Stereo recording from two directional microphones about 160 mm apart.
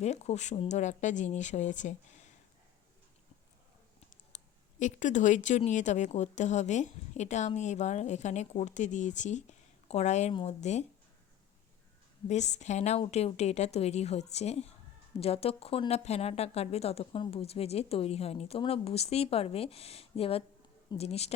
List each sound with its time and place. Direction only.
0.0 s speech: 45° left (ahead or behind)
4.3 s a sound: 45° left (ahead or behind)
4.8 s speech: 50° left (ahead or behind)
12.3 s speech: 45° left (ahead or behind)